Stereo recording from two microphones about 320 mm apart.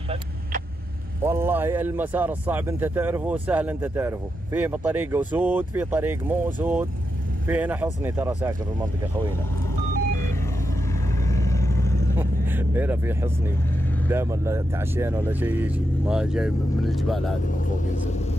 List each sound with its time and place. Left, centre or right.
1.2 s a man's voice: centre
9.9 s vehicle: right
11.2 s vehicle: centre
12.2 s vehicle: centre
14.0 s speech: centre